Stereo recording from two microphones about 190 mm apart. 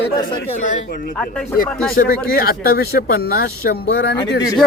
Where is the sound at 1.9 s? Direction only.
50° left (ahead or behind).